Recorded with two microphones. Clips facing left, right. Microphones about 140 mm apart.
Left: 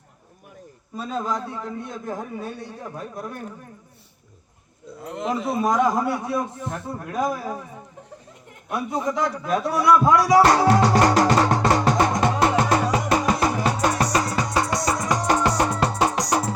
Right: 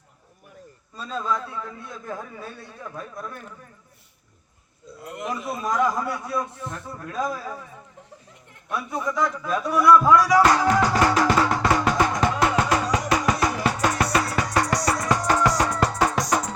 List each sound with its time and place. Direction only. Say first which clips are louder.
1.2 s a man's voice: even; 30° left (ahead or behind)
4.9 s a man's voice: left 4 dB; 25° left (ahead or behind)
8.7 s a man's voice: left 3 dB; 35° left (ahead or behind)
10.4 s music: left 2 dB; 35° left (ahead or behind)
13.7 s music: left 1 dB; 15° left (ahead or behind)
16.1 s music: left 1 dB; 10° left (ahead or behind)